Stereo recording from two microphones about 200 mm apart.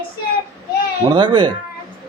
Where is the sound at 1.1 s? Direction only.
20° right (ahead or behind).